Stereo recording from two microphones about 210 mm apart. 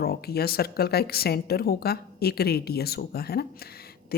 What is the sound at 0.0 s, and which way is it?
A woman's voice, 45° left (ahead or behind).